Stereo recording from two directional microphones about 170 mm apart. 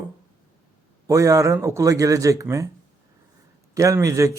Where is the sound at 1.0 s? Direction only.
20° right (ahead or behind).